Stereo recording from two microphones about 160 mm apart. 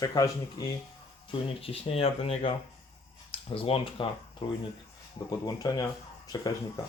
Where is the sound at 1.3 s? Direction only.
35° left (ahead or behind).